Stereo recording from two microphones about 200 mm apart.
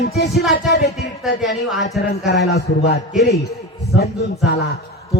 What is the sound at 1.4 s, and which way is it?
Speech, centre (ahead or behind).